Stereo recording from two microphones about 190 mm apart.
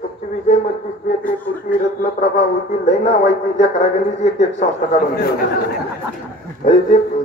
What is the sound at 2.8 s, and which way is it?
Speech, 35° left (ahead or behind).